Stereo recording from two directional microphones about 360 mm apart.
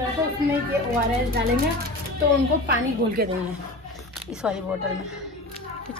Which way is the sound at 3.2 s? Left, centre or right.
Right.